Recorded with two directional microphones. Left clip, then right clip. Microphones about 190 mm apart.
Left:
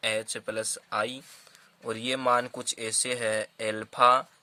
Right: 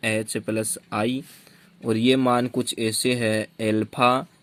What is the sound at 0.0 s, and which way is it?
Speech, 20° right (ahead or behind).